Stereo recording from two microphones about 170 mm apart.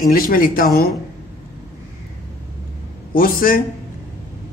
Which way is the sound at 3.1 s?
55° left (ahead or behind).